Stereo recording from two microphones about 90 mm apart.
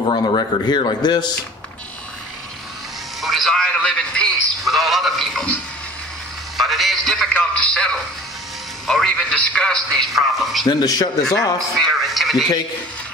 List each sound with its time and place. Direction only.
0.0 s a man's voice: 70° left (ahead or behind); by 1.3 s 55° left (ahead or behind)
3.2 s a sound: centre (ahead or behind)
4.6 s speech: centre (ahead or behind)
6.5 s a man's voice: centre (ahead or behind)
10.6 s speech: 50° left (ahead or behind)
11.8 s speech: centre (ahead or behind)